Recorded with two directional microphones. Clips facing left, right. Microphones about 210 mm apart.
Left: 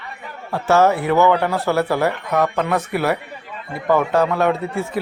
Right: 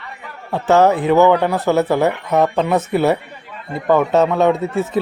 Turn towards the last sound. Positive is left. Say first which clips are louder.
# right 4 dB
turn(degrees=-20)  # may be behind; listen again after turning